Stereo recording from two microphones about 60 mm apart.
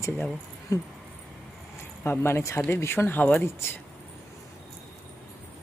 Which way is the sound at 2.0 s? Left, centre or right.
Left.